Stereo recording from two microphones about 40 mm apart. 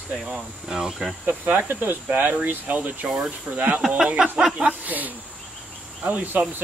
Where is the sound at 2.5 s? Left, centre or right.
Right.